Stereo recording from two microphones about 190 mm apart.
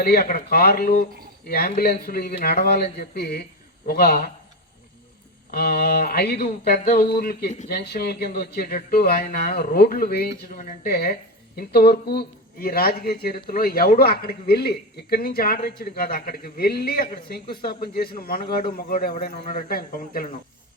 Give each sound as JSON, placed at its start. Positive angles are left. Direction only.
{"t": 0.0, "sound": "speech", "side_deg": 55}
{"t": 5.5, "sound": "speech", "side_deg": 55}